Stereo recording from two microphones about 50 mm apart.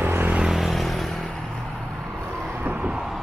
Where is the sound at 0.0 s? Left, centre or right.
Right.